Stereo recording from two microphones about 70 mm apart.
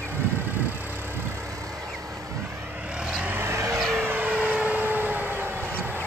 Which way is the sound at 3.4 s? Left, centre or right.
Right.